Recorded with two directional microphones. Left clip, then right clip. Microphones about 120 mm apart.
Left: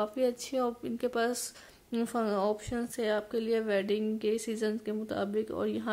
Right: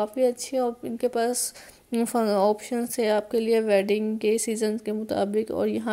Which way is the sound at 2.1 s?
40° right (ahead or behind).